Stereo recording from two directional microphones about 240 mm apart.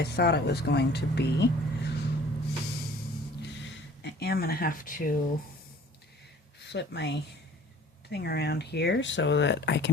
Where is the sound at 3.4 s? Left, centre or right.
Left.